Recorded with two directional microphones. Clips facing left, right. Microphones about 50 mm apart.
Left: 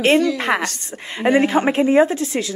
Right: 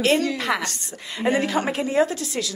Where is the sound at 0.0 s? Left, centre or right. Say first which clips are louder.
Left 5 dB; left.